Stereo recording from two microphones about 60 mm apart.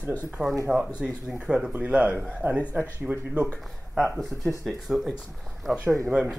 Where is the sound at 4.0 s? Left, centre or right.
Centre.